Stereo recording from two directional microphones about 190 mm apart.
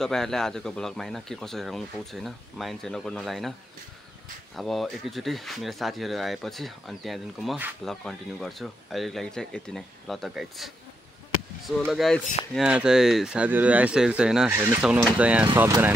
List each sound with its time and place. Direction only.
0.0 s speech: centre (ahead or behind)
4.6 s speech: centre (ahead or behind)